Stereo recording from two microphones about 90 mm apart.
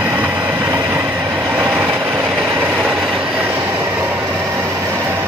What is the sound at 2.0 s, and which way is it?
Vehicle, 20° right (ahead or behind).